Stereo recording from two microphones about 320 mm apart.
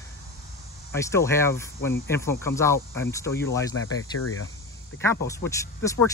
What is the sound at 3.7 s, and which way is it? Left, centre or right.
Speech, left.